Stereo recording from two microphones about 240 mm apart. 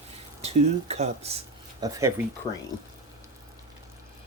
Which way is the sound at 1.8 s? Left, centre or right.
Centre.